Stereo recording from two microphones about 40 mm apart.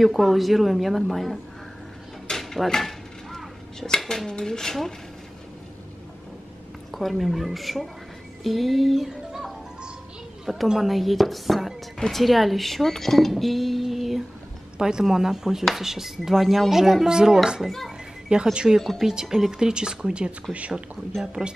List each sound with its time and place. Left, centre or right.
0.0 s a woman's voice: centre
2.2 s dishes: centre
4.3 s speech: centre
6.9 s a woman's voice: centre
10.4 s a woman's voice: centre
13.3 s a sound: centre
14.8 s speech: centre
16.3 s speech: centre
17.6 s a child's voice: centre
18.3 s speech: right
18.8 s a woman's voice: centre
19.5 s speech: centre
20.5 s a woman's voice: centre
21.2 s speech: centre